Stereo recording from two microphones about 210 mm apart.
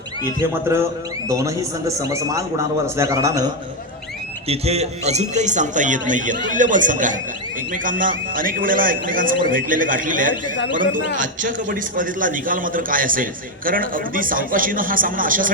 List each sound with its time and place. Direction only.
0.3 s a man's voice: 10° right (ahead or behind)
4.4 s a man's voice: 30° right (ahead or behind)